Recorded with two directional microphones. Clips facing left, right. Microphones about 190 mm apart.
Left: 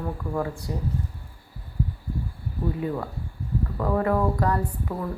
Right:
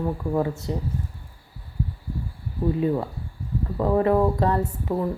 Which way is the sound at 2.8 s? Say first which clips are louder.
Right 5 dB; 20° right (ahead or behind).